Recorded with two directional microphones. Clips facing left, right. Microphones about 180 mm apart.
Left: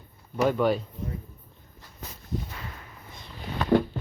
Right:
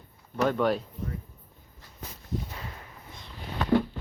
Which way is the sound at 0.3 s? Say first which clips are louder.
Left 2 dB; 5° left (ahead or behind).